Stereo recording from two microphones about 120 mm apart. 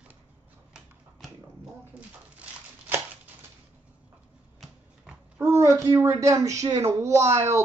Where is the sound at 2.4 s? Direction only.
15° right (ahead or behind).